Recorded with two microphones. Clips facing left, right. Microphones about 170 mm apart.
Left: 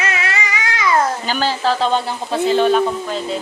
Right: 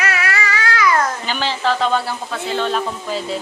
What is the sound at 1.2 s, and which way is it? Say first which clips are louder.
Speech: left 2 dB; 40° left (ahead or behind).